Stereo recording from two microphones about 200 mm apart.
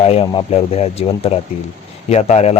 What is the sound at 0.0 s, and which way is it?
Speech, 30° left (ahead or behind).